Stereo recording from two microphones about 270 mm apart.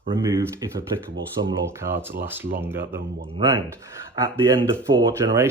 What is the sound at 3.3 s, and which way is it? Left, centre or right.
Speech, centre.